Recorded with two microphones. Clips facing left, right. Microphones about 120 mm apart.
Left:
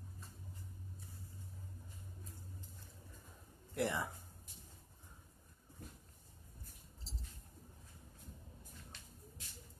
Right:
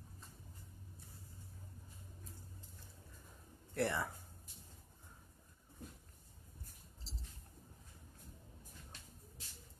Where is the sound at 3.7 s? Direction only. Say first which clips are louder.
Right 1 dB; 15° left (ahead or behind).